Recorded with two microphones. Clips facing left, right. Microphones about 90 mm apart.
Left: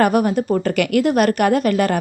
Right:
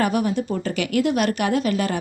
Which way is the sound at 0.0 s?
50° left (ahead or behind).